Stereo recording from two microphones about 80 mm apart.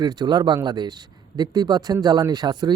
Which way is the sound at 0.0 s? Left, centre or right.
Right.